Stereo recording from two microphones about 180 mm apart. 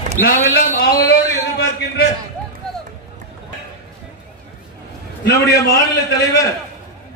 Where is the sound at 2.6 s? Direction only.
5° left (ahead or behind).